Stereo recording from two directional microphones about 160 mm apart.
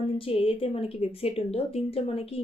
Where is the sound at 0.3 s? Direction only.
35° left (ahead or behind).